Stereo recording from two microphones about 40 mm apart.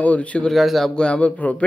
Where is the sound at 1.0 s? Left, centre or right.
Left.